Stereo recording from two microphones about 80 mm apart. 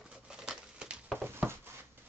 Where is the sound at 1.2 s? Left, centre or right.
Right.